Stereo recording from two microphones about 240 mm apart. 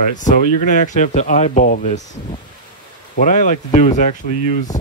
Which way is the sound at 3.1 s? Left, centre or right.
Left.